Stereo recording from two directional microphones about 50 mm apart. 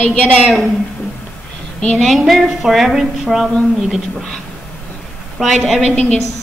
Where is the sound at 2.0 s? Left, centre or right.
Centre.